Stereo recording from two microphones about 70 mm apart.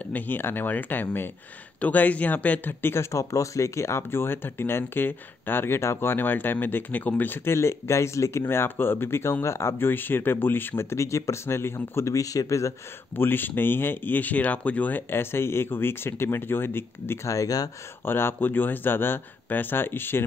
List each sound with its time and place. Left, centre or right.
0.1 s speech: left
7.4 s speech: left
13.1 s speech: left
17.3 s speech: left
18.0 s speech: left